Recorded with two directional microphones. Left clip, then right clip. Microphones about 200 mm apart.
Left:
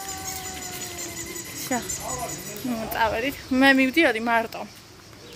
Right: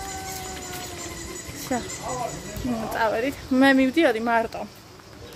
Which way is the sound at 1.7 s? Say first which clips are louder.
Even; 15° left (ahead or behind).